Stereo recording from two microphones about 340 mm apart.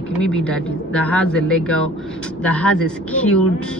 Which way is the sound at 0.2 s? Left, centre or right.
Centre.